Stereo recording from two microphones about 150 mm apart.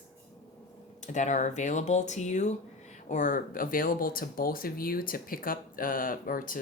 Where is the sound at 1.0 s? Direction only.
55° left (ahead or behind).